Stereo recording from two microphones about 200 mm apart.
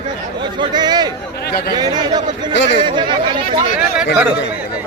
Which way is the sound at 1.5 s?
50° left (ahead or behind).